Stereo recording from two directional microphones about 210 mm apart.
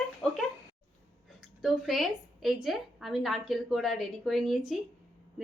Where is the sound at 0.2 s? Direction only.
Centre (ahead or behind).